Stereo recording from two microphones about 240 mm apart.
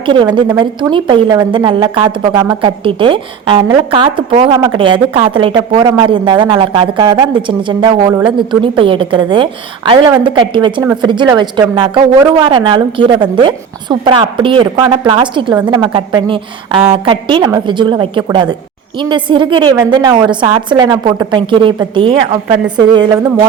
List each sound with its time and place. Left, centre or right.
0.0 s a woman's voice: centre